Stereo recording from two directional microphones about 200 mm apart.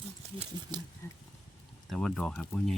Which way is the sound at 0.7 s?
20° right (ahead or behind).